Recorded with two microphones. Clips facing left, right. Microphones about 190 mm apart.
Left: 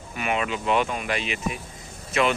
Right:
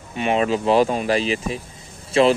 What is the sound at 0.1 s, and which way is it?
Speech, 30° right (ahead or behind).